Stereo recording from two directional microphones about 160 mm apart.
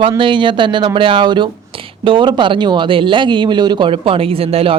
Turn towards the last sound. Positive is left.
turn(degrees=-35)  # may be behind; listen again after turning